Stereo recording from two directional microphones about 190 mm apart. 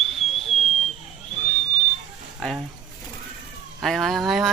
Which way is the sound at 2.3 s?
Centre (ahead or behind).